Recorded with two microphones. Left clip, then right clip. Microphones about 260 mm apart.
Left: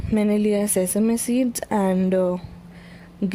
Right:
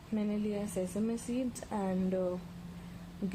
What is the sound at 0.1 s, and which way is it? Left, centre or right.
Speech, left.